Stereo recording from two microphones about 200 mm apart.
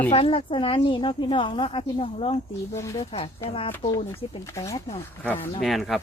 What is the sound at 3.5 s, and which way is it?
Speech, 30° left (ahead or behind).